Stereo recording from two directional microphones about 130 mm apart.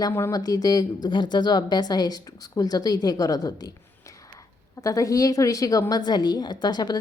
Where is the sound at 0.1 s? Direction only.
25° left (ahead or behind).